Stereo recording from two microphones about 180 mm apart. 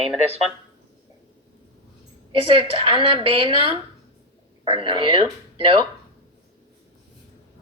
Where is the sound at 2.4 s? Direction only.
30° right (ahead or behind).